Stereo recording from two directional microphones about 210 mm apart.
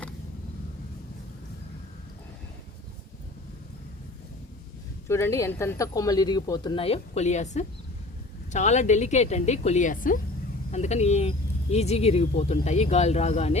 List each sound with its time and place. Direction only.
5.0 s speech: 10° left (ahead or behind); by 13.6 s 30° left (ahead or behind)